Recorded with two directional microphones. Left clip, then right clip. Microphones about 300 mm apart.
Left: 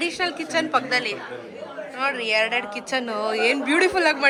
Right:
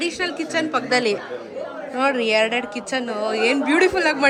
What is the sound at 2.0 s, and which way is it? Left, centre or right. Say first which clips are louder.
A woman's voice: right 4 dB; centre.